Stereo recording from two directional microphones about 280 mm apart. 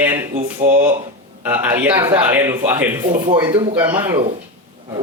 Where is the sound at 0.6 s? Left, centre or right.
Right.